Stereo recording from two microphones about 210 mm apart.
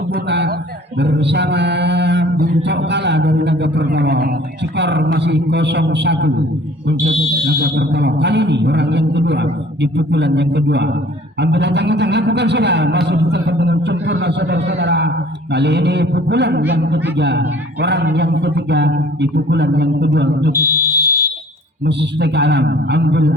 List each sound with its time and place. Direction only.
0.1 s a sound: 50° right (ahead or behind)
0.9 s mantra: 55° right (ahead or behind)
2.6 s a man's voice: 55° right (ahead or behind)
7.6 s a man's voice: 55° right (ahead or behind)
20.6 s fire alarm: 15° right (ahead or behind)
21.8 s a man's voice: 55° right (ahead or behind)